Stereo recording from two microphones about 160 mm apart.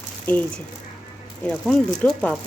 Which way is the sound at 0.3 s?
10° left (ahead or behind).